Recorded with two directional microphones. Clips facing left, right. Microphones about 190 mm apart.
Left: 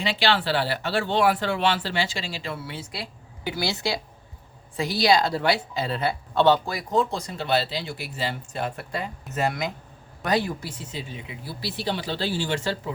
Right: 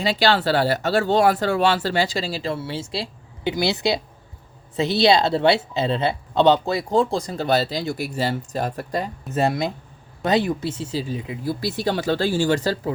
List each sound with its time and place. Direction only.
0.0 s speech: 40° right (ahead or behind)